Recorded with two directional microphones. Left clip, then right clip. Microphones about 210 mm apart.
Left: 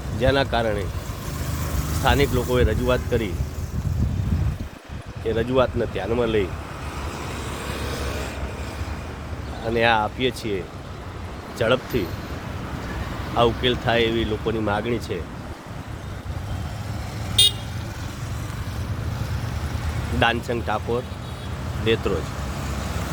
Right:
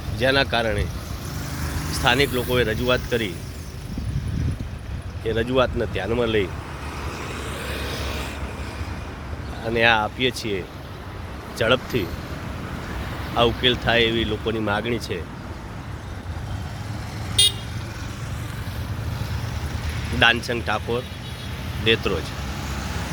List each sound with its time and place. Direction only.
0.2 s speech: centre (ahead or behind)
1.6 s vehicle: 45° left (ahead or behind)
2.0 s speech: centre (ahead or behind)
5.2 s speech: centre (ahead or behind)
7.5 s vehicle: 55° left (ahead or behind)
9.6 s speech: centre (ahead or behind)
13.6 s speech: 5° left (ahead or behind)
17.4 s vehicle: 65° left (ahead or behind)
20.1 s speech: centre (ahead or behind)